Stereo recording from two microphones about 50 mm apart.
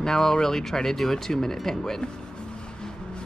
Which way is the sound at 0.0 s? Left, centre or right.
Centre.